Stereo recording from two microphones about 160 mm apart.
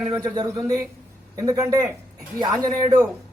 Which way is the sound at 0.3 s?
25° right (ahead or behind).